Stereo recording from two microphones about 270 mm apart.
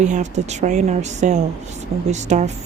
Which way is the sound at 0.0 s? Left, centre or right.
Right.